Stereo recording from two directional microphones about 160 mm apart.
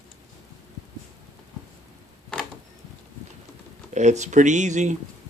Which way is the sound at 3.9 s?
45° right (ahead or behind).